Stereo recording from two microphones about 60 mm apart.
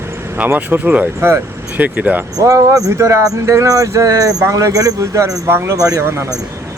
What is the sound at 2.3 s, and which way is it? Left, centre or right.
Speech, right.